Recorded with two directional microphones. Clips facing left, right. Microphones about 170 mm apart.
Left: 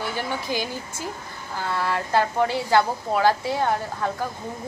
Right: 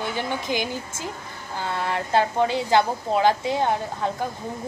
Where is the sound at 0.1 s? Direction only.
20° right (ahead or behind).